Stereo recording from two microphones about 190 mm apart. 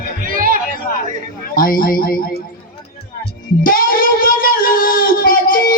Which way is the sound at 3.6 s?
50° left (ahead or behind).